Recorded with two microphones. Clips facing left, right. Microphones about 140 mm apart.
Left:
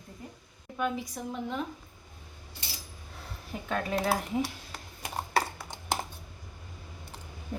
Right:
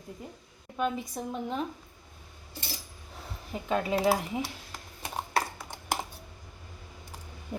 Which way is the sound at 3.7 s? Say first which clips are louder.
Right 3 dB; 10° right (ahead or behind).